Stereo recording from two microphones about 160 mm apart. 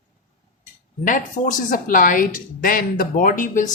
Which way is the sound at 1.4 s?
50° left (ahead or behind).